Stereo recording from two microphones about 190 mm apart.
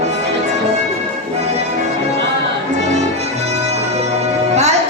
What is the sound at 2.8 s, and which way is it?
Music, 35° right (ahead or behind).